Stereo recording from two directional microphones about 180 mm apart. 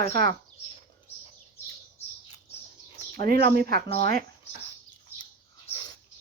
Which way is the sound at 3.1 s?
55° right (ahead or behind).